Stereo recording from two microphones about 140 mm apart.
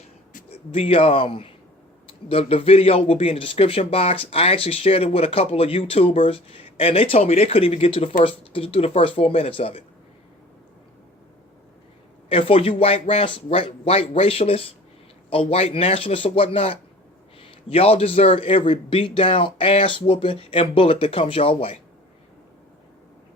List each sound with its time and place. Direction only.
0.5 s a man's voice: 45° left (ahead or behind)
12.3 s a man's voice: 40° left (ahead or behind)